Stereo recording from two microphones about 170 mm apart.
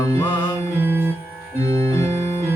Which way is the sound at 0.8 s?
15° right (ahead or behind).